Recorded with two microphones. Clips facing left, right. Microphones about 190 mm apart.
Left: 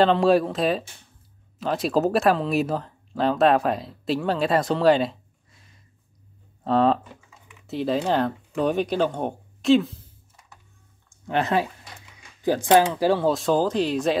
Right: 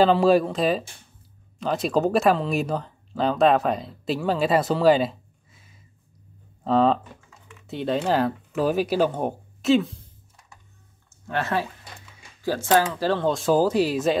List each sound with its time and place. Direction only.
0.0 s speech: 5° right (ahead or behind)
6.6 s typing: centre (ahead or behind)
11.1 s a sound: 15° left (ahead or behind)
12.1 s speech: 15° left (ahead or behind); by 14.1 s 5° right (ahead or behind)